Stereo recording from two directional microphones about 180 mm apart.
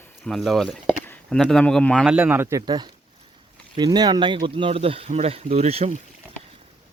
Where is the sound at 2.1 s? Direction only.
10° right (ahead or behind); by 5.9 s 35° right (ahead or behind).